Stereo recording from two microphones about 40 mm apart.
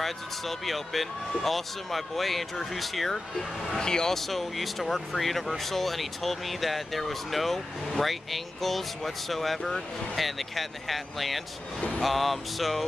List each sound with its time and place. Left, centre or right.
0.0 s speech: centre
4.3 s speech: centre